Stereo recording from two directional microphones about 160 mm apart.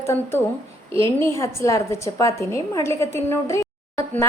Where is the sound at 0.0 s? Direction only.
15° left (ahead or behind).